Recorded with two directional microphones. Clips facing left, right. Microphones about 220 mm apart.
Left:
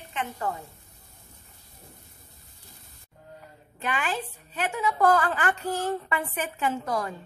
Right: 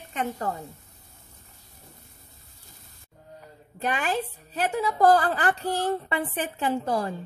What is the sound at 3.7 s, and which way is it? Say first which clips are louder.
A woman's voice: right 3 dB; 40° right (ahead or behind).